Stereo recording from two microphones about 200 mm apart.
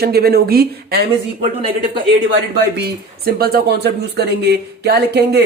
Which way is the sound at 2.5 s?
55° right (ahead or behind).